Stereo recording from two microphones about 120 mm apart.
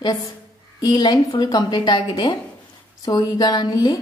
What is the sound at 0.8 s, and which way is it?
A woman's voice, 35° left (ahead or behind).